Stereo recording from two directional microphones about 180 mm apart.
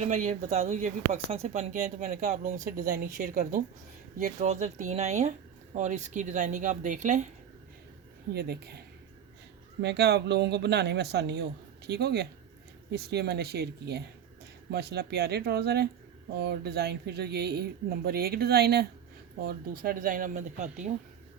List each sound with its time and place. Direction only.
0.0 s speech: 40° right (ahead or behind)
8.3 s speech: 60° right (ahead or behind)
9.8 s speech: 70° right (ahead or behind); by 20.9 s 40° right (ahead or behind)